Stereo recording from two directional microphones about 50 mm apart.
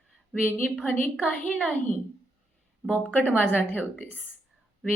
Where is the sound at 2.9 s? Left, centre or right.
Left.